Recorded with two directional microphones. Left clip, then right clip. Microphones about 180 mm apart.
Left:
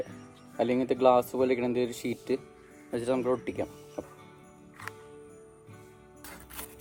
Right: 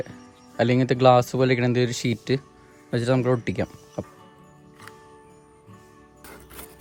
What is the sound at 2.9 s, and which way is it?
Speech, 70° right (ahead or behind).